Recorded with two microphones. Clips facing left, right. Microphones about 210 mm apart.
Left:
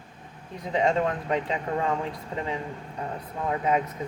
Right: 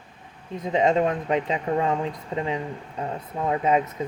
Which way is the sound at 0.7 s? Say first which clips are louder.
Right 3 dB; 20° right (ahead or behind).